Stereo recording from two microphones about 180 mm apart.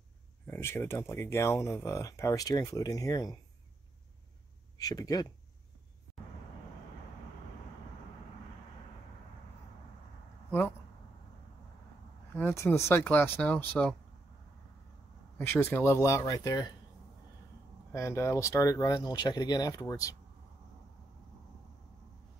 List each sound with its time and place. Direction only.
0.5 s speech: 15° left (ahead or behind)
4.7 s speech: 20° left (ahead or behind)
12.4 s speech: 15° left (ahead or behind)
15.3 s speech: 10° left (ahead or behind)
17.9 s speech: 15° left (ahead or behind)